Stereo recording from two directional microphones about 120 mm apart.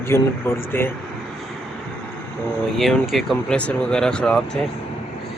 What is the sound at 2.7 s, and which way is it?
Speech, centre (ahead or behind).